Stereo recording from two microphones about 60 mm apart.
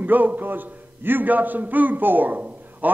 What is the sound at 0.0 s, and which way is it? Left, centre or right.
A man's voice, right.